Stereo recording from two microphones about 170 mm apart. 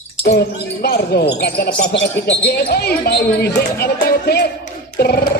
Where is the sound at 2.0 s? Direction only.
75° left (ahead or behind).